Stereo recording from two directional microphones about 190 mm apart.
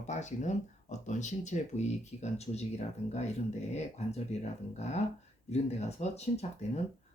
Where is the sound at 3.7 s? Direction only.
35° left (ahead or behind).